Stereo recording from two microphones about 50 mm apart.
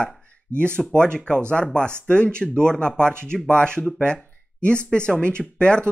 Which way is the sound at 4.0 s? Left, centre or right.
Left.